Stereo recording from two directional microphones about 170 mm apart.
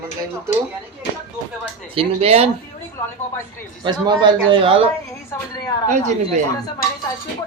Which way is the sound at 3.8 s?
25° right (ahead or behind).